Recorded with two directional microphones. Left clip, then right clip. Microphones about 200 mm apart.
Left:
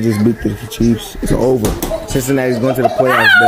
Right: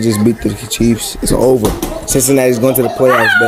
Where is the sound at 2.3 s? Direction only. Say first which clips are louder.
Right 4 dB; 15° right (ahead or behind).